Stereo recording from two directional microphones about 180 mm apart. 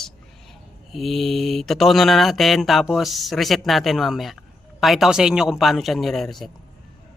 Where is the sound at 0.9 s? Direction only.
Centre (ahead or behind).